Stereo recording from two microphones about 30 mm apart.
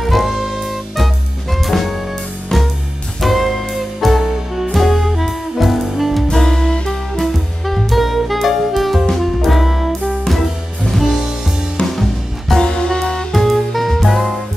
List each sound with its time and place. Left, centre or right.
0.0 s music: centre
2.5 s music: centre
3.2 s music: centre
4.2 s music: centre
6.3 s music: centre
7.2 s music: centre
11.8 s music: centre
12.6 s music: left
13.3 s music: centre